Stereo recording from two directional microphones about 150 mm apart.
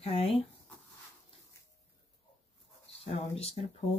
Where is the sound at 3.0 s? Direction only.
40° left (ahead or behind).